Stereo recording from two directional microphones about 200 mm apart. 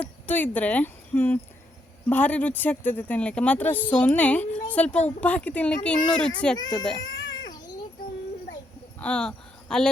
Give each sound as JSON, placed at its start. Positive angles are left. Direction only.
{"t": 0.0, "sound": "a child's voice", "side_deg": 10}
{"t": 6.6, "sound": "speech", "side_deg": 20}
{"t": 7.0, "sound": "cat", "side_deg": 20}
{"t": 9.0, "sound": "speech", "side_deg": 5}